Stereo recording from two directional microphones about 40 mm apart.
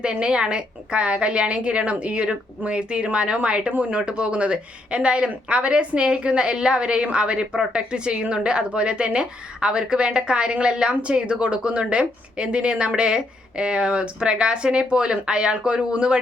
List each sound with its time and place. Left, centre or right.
0.0 s a woman's voice: right
3.7 s speech: right
4.0 s a woman's voice: right